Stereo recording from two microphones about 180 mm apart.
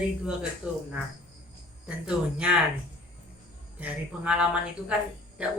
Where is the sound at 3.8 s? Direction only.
5° right (ahead or behind).